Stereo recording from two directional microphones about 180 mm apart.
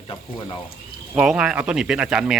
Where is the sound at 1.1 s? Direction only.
5° right (ahead or behind).